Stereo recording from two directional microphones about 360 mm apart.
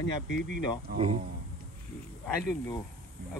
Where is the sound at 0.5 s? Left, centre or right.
Centre.